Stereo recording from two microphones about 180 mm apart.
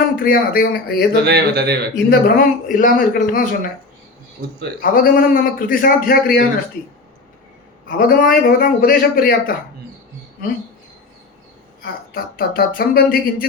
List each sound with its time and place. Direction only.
0.2 s speech: 55° left (ahead or behind)
1.1 s speech: 65° right (ahead or behind)
2.0 s speech: 55° left (ahead or behind)
4.4 s speech: 55° right (ahead or behind)
4.8 s speech: 50° left (ahead or behind)
7.9 s speech: 55° left (ahead or behind)
12.1 s speech: 55° left (ahead or behind)